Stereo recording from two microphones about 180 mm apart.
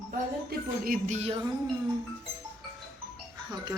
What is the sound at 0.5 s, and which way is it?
Speech, 60° right (ahead or behind).